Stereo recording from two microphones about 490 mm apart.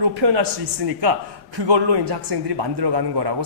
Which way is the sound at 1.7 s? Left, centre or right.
Right.